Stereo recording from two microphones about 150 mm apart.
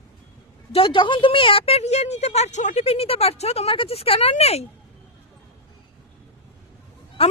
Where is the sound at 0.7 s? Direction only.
35° left (ahead or behind).